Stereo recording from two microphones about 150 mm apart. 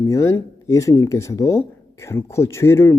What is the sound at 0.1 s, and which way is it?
Speech, 20° left (ahead or behind).